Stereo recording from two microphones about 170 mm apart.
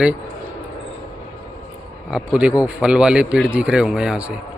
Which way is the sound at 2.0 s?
5° right (ahead or behind).